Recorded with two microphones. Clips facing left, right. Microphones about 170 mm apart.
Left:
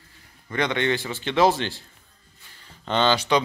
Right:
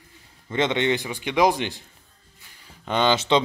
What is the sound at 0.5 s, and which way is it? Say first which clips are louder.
A man's voice: right 2 dB; 20° right (ahead or behind).